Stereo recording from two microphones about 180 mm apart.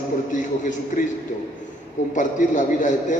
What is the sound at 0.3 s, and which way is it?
Speech, 45° left (ahead or behind).